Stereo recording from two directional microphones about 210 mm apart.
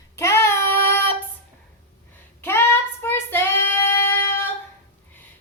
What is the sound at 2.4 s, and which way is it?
Child singing, 10° left (ahead or behind).